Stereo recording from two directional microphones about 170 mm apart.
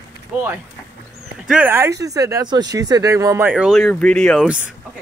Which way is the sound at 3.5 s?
5° right (ahead or behind).